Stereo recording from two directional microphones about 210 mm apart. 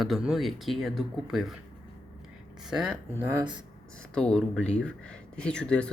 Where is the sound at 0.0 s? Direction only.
Centre (ahead or behind).